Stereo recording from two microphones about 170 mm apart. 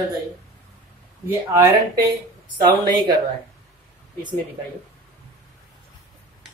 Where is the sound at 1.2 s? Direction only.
20° right (ahead or behind).